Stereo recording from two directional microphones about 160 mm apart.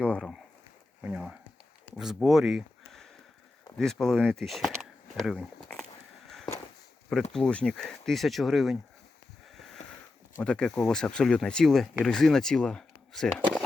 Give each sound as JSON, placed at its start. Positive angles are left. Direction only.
{"t": 0.0, "sound": "a sound", "side_deg": 5}
{"t": 1.0, "sound": "speech", "side_deg": -5}
{"t": 6.2, "sound": "a sound", "side_deg": 0}
{"t": 7.1, "sound": "speech", "side_deg": 5}
{"t": 9.8, "sound": "sniff", "side_deg": 45}
{"t": 10.4, "sound": "speech", "side_deg": 5}